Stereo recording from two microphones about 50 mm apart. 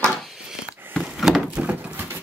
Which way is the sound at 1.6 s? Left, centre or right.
Right.